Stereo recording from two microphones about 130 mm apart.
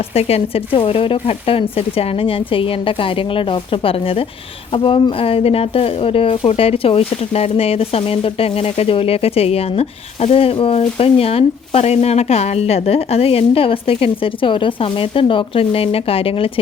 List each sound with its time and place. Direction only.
0.1 s speech: 50° left (ahead or behind)